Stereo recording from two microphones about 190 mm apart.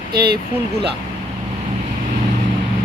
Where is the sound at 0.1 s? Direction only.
55° right (ahead or behind).